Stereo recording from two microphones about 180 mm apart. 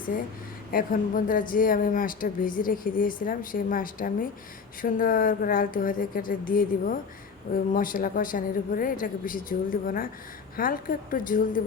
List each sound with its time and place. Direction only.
0.1 s a woman's voice: 50° left (ahead or behind)